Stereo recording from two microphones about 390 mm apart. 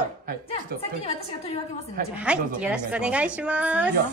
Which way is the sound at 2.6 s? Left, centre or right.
Centre.